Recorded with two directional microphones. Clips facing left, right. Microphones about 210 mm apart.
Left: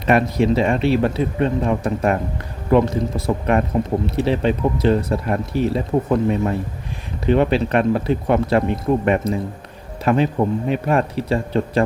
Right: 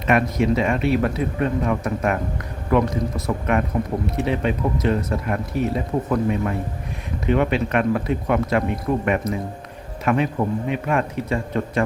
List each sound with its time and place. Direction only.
0.1 s a man's voice: 30° left (ahead or behind)